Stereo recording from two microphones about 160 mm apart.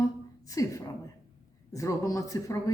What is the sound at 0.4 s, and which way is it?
A woman's voice, 20° left (ahead or behind).